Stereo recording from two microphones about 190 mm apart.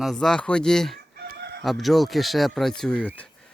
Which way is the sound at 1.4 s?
60° right (ahead or behind).